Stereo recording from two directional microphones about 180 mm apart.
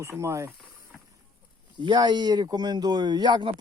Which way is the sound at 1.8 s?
25° right (ahead or behind).